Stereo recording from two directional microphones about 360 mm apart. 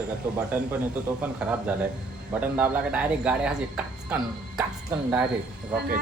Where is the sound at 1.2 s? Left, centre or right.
Centre.